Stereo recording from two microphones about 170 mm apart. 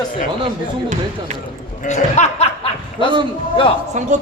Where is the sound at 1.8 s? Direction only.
45° left (ahead or behind).